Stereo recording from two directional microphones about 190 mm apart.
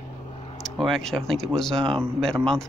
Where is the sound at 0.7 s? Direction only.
Centre (ahead or behind).